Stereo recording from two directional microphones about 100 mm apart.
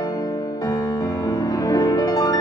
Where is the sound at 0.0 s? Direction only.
35° left (ahead or behind).